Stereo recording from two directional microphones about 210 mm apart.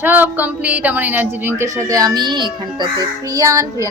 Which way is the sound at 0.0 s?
10° right (ahead or behind).